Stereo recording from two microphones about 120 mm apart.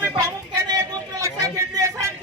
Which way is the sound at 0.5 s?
30° right (ahead or behind).